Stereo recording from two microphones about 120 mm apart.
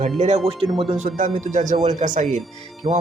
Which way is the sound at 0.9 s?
75° right (ahead or behind).